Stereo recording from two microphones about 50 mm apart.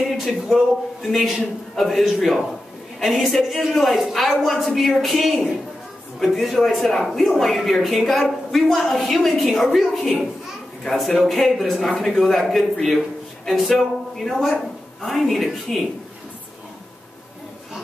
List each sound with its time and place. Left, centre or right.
0.0 s speech: centre